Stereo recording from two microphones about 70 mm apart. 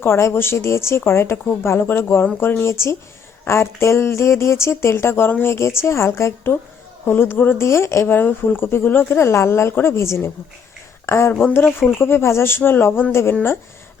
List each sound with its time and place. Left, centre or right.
0.0 s speech: left